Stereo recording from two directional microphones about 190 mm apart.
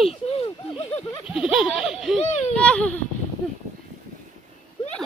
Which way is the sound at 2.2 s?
35° left (ahead or behind).